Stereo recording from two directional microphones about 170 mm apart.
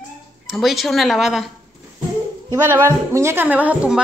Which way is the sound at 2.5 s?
10° right (ahead or behind).